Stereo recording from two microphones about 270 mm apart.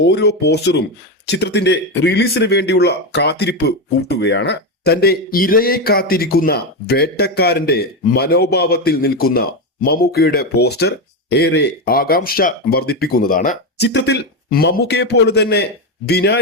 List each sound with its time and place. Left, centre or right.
0.0 s speech: left